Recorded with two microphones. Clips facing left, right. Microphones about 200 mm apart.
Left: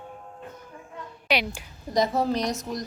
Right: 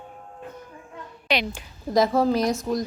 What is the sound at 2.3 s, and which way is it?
Speech, centre (ahead or behind).